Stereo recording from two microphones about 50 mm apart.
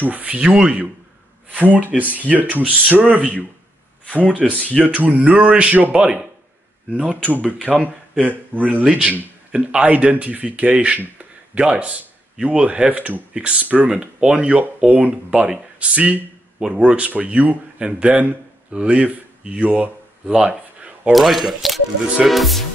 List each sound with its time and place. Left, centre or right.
0.0 s speech: right
4.4 s speech: centre
4.8 s speech: right
7.7 s speech: right
8.8 s speech: centre
19.7 s a sound: right
21.1 s speech: centre